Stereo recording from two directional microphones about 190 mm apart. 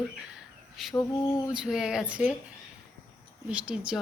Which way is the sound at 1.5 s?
5° right (ahead or behind).